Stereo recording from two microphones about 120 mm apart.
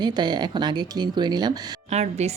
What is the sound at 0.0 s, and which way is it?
Speech, 35° right (ahead or behind).